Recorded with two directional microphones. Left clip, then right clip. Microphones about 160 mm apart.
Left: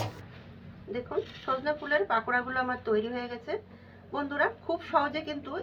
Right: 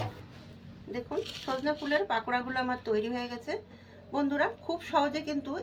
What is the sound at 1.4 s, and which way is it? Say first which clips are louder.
A woman's voice: left 2 dB; 20° right (ahead or behind).